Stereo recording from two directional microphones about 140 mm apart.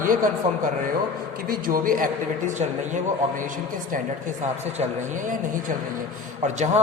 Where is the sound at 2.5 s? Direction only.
60° right (ahead or behind).